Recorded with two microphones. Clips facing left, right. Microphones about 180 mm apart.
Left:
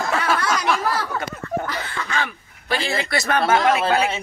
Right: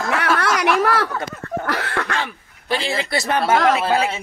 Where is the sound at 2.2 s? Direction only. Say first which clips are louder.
Right 1 dB; 25° right (ahead or behind).